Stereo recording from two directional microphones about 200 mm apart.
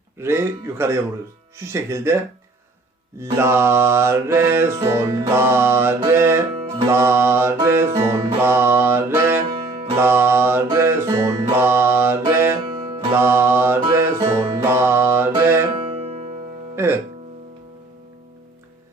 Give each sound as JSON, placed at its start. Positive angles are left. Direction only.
{"t": 0.2, "sound": "music", "side_deg": -10}
{"t": 3.3, "sound": "music", "side_deg": -10}
{"t": 12.9, "sound": "music", "side_deg": -25}
{"t": 13.1, "sound": "music", "side_deg": -10}
{"t": 15.7, "sound": "music", "side_deg": -30}
{"t": 16.7, "sound": "speech", "side_deg": -10}